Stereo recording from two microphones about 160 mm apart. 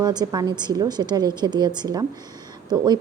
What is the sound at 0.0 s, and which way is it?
A woman's voice, 25° right (ahead or behind).